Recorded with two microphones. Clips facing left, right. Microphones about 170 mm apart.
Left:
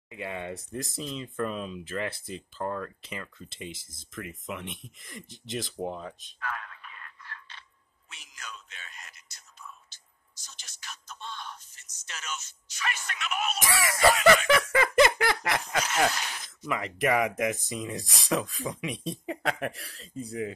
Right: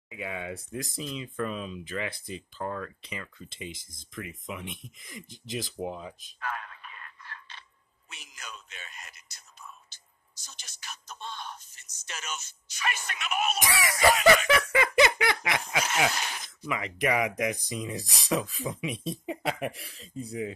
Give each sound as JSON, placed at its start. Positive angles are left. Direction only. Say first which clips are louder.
{"t": 0.1, "sound": "speech", "louder": "left 1 dB", "side_deg": 0}
{"t": 6.4, "sound": "a sound", "louder": "right 1 dB", "side_deg": -25}
{"t": 8.1, "sound": "whispering", "louder": "even", "side_deg": -15}
{"t": 10.4, "sound": "a sound", "louder": "right 1 dB", "side_deg": -15}
{"t": 12.1, "sound": "speech", "louder": "even", "side_deg": -15}
{"t": 13.6, "sound": "speech", "louder": "left 1 dB", "side_deg": 0}